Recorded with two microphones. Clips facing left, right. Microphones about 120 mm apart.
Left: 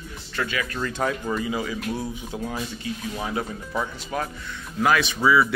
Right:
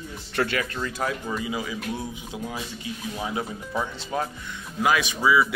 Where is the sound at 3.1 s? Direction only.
15° right (ahead or behind).